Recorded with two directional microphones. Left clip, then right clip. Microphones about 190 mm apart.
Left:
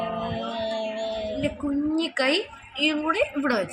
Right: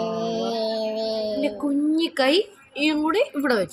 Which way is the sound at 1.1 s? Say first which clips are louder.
Right 4 dB; 50° right (ahead or behind).